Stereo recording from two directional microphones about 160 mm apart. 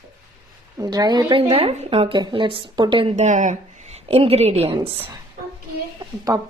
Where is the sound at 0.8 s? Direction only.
25° right (ahead or behind); by 4.8 s 40° right (ahead or behind).